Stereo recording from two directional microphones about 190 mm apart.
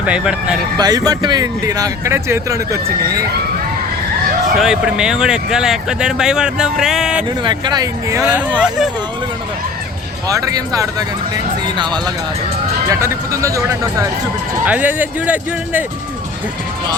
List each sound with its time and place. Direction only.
0.0 s speech: 5° right (ahead or behind)
0.8 s speech: 20° right (ahead or behind)
4.5 s speech: centre (ahead or behind)
7.4 s speech: 25° right (ahead or behind)
8.2 s speech: 5° right (ahead or behind)
10.2 s speech: 20° right (ahead or behind)